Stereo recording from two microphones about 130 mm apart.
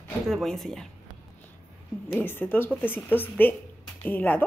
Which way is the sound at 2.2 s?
15° left (ahead or behind).